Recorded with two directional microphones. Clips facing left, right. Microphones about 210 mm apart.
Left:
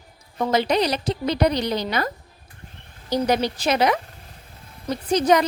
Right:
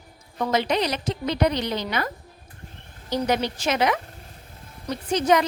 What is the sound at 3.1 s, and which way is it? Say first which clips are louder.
Speech: left 3 dB; 35° left (ahead or behind).